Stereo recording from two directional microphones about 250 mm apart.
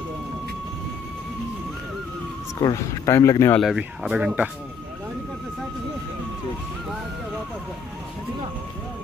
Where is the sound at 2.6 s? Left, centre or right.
Centre.